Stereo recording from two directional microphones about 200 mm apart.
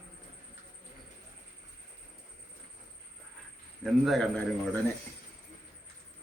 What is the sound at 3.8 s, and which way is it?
Speech, centre (ahead or behind).